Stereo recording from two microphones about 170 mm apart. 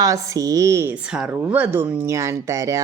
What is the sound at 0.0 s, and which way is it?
A woman's voice, 20° right (ahead or behind).